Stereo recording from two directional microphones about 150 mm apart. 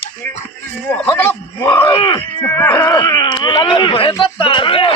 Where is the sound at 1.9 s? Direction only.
35° left (ahead or behind).